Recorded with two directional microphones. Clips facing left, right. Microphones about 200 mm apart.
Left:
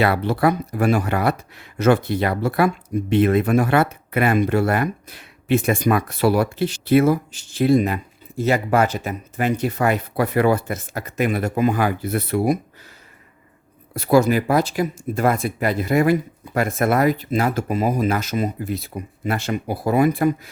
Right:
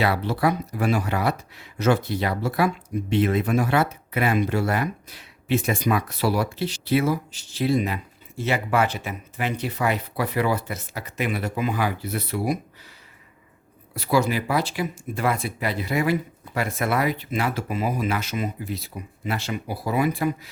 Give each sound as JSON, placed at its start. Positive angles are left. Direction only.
{"t": 0.0, "sound": "speech", "side_deg": 55}
{"t": 13.9, "sound": "speech", "side_deg": 45}